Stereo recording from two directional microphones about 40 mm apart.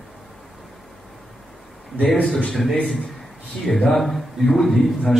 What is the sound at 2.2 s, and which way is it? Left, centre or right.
Speech, left.